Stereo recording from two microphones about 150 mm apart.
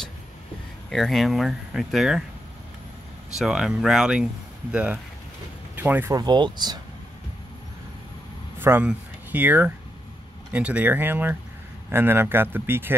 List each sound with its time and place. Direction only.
0.8 s speech: 5° left (ahead or behind)
3.3 s speech: 5° right (ahead or behind)
6.1 s speech: 30° right (ahead or behind)
8.5 s speech: 15° right (ahead or behind)